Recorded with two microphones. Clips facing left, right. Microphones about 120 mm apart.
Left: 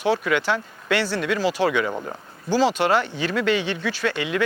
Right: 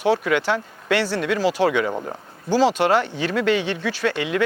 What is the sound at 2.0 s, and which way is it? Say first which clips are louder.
Speech: right 2 dB; 35° right (ahead or behind).